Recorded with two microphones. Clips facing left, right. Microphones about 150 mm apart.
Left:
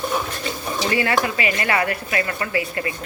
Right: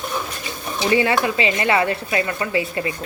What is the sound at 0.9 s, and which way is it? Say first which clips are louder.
Speech: right 4 dB; 20° right (ahead or behind).